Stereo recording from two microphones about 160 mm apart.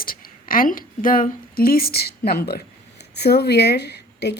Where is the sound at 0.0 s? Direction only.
65° left (ahead or behind).